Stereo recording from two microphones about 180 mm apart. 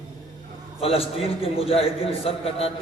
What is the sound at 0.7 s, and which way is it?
A man's voice, 30° left (ahead or behind).